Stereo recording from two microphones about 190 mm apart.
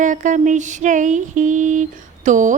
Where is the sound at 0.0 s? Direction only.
40° right (ahead or behind).